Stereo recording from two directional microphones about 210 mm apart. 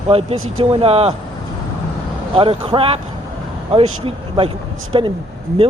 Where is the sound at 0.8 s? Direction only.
30° right (ahead or behind).